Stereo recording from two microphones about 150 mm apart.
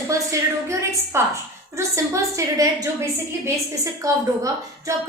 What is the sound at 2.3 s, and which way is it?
A woman's voice, 20° right (ahead or behind).